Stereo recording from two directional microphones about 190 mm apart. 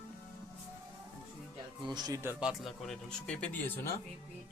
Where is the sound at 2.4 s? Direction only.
Centre (ahead or behind).